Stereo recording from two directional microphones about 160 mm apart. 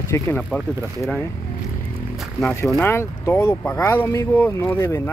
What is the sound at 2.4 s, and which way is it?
Speech, 15° left (ahead or behind).